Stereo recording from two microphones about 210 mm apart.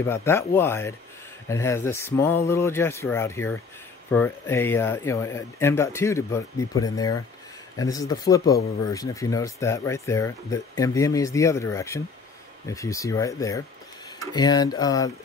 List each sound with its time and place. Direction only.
0.0 s speech: 10° left (ahead or behind)